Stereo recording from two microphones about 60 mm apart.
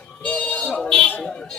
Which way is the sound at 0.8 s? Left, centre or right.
Centre.